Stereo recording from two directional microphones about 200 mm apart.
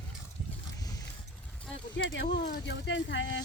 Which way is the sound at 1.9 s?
65° left (ahead or behind).